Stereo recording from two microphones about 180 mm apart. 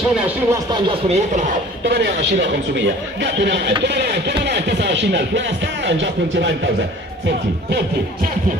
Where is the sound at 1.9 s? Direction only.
70° right (ahead or behind).